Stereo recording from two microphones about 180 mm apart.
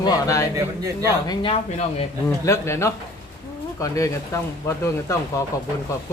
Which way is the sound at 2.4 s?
15° left (ahead or behind).